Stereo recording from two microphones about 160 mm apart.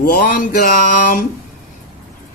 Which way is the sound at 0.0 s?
60° left (ahead or behind).